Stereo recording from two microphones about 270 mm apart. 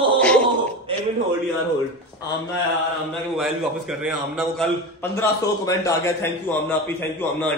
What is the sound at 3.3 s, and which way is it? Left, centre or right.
A man's voice, centre.